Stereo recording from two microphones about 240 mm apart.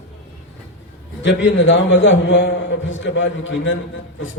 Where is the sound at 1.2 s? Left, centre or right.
Left.